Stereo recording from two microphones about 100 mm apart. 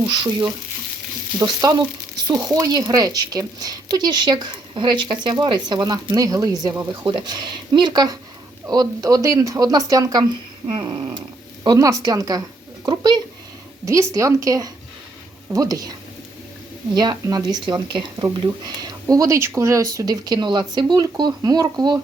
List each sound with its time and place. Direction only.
0.1 s speech: 45° right (ahead or behind)
10.7 s speech: 50° right (ahead or behind)
11.6 s speech: 40° right (ahead or behind)
13.8 s speech: 30° right (ahead or behind)